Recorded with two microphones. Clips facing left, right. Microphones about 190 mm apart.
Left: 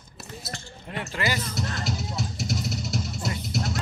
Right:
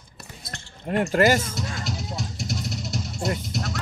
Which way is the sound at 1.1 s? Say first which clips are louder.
Right 10 dB; 45° right (ahead or behind).